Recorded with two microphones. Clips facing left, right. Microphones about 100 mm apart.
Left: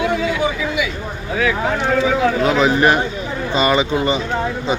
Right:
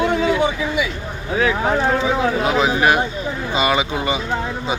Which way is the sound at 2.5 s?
5° right (ahead or behind).